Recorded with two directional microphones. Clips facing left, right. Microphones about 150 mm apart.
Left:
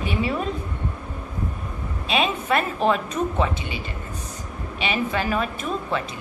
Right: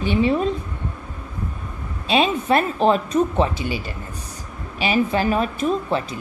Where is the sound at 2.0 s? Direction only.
30° right (ahead or behind).